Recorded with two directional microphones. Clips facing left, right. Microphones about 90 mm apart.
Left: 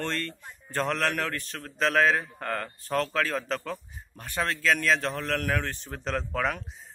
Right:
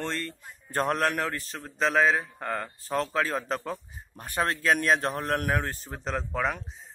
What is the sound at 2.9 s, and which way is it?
Speech, 30° right (ahead or behind).